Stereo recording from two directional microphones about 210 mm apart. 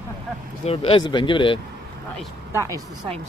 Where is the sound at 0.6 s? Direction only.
30° left (ahead or behind).